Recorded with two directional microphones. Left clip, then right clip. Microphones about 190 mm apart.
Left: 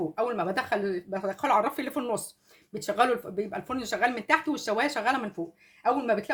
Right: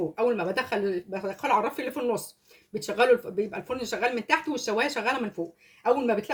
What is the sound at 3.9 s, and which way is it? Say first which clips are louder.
Speech: left 1 dB; 35° left (ahead or behind).